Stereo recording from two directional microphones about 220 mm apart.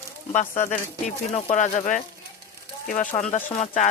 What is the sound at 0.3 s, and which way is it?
Speech, 35° left (ahead or behind).